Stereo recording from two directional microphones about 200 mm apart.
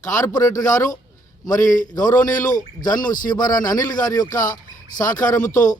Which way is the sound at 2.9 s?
20° left (ahead or behind).